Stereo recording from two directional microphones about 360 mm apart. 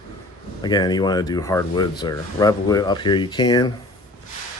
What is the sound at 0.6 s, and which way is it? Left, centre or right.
Speech, centre.